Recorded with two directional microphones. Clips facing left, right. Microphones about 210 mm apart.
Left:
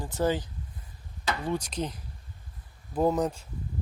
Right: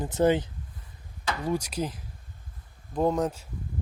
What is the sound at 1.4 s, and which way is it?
Speech, 10° right (ahead or behind).